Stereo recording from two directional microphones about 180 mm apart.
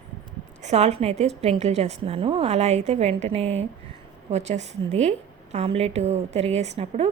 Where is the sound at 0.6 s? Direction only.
40° right (ahead or behind).